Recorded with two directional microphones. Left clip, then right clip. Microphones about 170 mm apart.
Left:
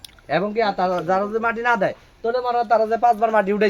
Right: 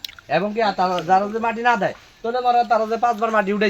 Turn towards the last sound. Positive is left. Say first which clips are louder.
# left 1 dB
turn(degrees=20)  # may be behind; listen again after turning